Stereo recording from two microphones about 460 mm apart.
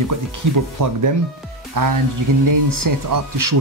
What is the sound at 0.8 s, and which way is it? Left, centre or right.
Speech, right.